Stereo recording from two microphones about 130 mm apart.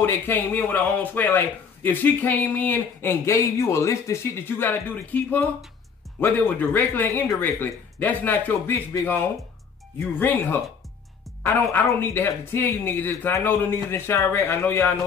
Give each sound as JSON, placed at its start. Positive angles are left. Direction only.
{"t": 0.0, "sound": "a man's voice", "side_deg": 15}